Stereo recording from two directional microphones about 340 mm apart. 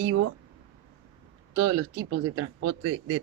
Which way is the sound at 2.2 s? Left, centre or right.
Right.